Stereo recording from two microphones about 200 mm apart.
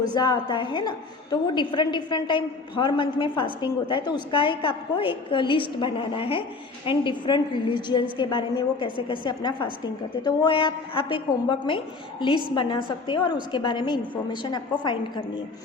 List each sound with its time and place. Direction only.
0.0 s a woman's voice: 20° left (ahead or behind)